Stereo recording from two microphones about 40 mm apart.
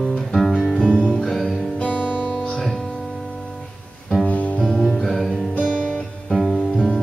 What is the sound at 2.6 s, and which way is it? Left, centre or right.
Music, centre.